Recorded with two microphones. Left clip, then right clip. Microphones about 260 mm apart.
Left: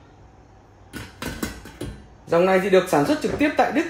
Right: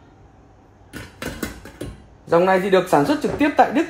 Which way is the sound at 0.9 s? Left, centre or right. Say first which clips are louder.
Right 1 dB; centre.